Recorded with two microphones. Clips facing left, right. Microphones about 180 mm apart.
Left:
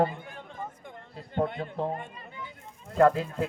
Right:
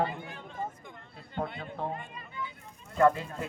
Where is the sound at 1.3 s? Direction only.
50° left (ahead or behind).